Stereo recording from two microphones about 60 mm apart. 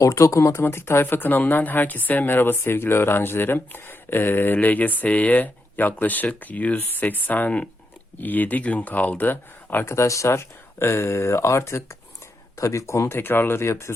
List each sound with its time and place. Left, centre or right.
0.0 s speech: left
9.8 s speech: left